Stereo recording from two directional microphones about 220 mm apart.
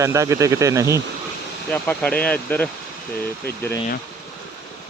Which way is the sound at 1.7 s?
5° left (ahead or behind).